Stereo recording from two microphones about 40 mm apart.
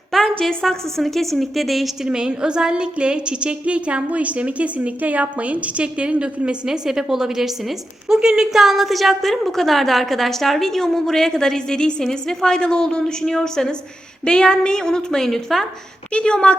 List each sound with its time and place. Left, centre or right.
0.4 s a woman's voice: centre
2.0 s a woman's voice: right
6.7 s a woman's voice: centre
8.5 s a woman's voice: centre
16.1 s a woman's voice: left